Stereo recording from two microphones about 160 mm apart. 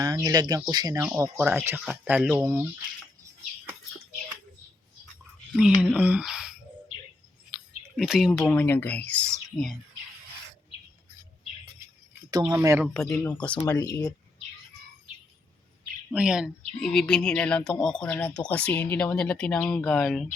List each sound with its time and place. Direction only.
0.0 s speech: 25° right (ahead or behind)
5.5 s speech: 5° right (ahead or behind)
7.9 s speech: centre (ahead or behind)
12.5 s speech: 20° right (ahead or behind)
12.8 s speech: 5° left (ahead or behind)
13.7 s speech: 20° left (ahead or behind)
16.1 s speech: 5° right (ahead or behind)